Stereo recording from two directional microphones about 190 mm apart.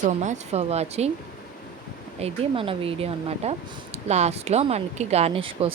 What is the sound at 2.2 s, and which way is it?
Speech, 30° right (ahead or behind).